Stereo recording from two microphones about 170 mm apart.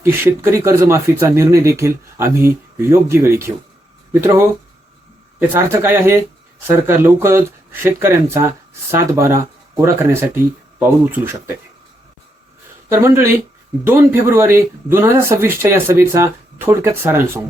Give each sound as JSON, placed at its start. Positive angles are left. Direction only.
{"t": 0.0, "sound": "speech", "side_deg": -15}
{"t": 5.4, "sound": "speech", "side_deg": -15}
{"t": 12.9, "sound": "speech", "side_deg": -15}